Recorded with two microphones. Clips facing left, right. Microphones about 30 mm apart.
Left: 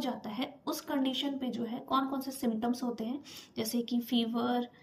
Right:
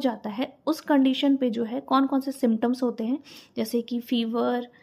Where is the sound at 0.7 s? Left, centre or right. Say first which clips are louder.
Right 12 dB; right.